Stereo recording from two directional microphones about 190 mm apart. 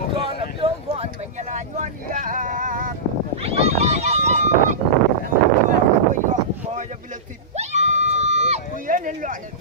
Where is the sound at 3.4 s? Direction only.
30° right (ahead or behind).